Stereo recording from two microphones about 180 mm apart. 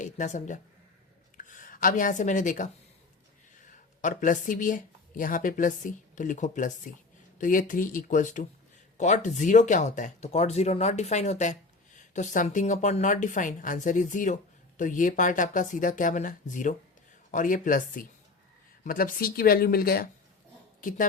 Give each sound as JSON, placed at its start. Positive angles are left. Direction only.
{"t": 0.0, "sound": "speech", "side_deg": 45}
{"t": 4.0, "sound": "speech", "side_deg": 45}